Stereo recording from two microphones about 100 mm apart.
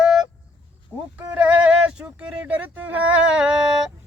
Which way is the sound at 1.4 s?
15° right (ahead or behind).